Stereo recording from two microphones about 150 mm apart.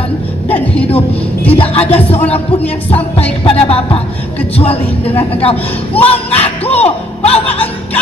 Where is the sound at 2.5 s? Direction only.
40° left (ahead or behind).